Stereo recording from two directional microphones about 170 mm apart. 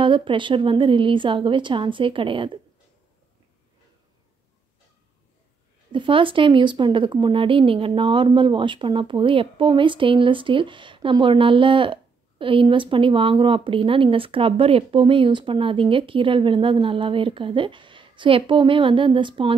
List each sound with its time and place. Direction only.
0.0 s speech: 30° right (ahead or behind)
5.9 s a woman's voice: 30° right (ahead or behind)